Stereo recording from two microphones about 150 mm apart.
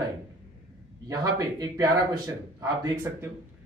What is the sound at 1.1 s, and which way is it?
Speech, 25° right (ahead or behind).